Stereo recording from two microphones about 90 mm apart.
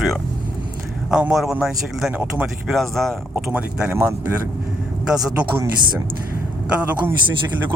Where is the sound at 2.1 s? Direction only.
15° right (ahead or behind).